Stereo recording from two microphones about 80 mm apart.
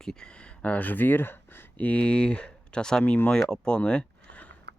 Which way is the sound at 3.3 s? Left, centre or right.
Centre.